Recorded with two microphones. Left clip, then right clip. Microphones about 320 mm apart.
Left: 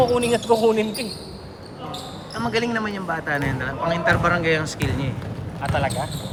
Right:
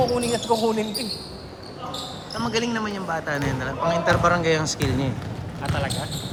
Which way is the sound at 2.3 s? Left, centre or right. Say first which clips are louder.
Left 2 dB; centre.